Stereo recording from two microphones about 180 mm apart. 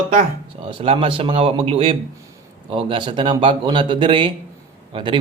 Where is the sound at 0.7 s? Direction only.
30° right (ahead or behind).